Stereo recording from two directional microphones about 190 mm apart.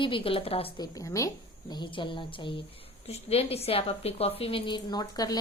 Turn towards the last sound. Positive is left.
turn(degrees=20)  # may be behind; listen again after turning